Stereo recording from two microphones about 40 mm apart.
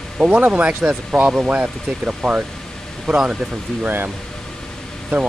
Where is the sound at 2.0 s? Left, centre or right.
Right.